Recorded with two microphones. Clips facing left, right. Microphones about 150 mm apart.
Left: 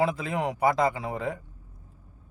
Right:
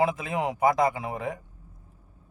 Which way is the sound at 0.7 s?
15° right (ahead or behind).